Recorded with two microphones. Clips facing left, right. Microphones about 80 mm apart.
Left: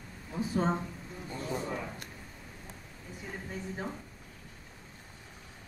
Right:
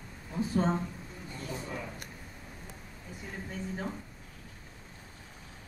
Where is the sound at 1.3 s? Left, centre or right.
Left.